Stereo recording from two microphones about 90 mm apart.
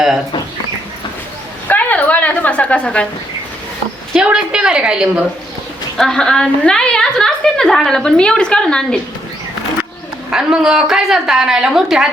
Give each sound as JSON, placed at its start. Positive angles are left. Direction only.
{"t": 1.6, "sound": "a sound", "side_deg": 20}
{"t": 4.1, "sound": "a woman's voice", "side_deg": -10}
{"t": 6.0, "sound": "a woman's voice", "side_deg": 5}
{"t": 10.3, "sound": "a woman's voice", "side_deg": -5}